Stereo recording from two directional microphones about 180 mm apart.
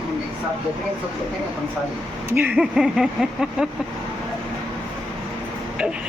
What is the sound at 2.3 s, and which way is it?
Speech, 10° right (ahead or behind).